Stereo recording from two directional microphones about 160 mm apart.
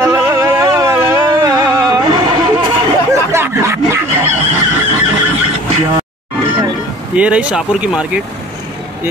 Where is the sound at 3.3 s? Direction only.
15° right (ahead or behind).